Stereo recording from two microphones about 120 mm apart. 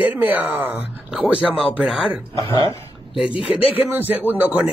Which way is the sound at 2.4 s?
45° right (ahead or behind).